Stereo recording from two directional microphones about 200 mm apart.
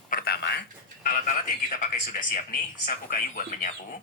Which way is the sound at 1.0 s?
45° left (ahead or behind).